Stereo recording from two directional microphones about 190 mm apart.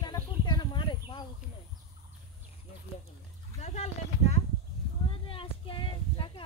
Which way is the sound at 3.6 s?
35° left (ahead or behind).